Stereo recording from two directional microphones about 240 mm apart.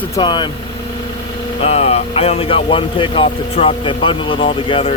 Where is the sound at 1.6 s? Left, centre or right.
Left.